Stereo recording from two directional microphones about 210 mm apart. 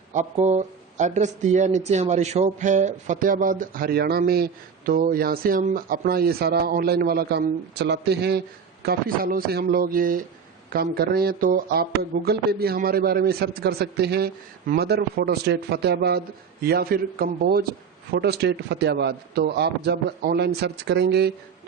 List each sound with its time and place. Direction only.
0.1 s speech: 35° right (ahead or behind); by 21.3 s 50° right (ahead or behind)